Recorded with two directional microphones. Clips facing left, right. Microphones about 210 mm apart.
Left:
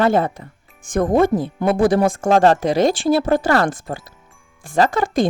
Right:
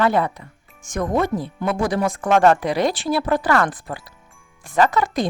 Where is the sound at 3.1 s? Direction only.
25° left (ahead or behind).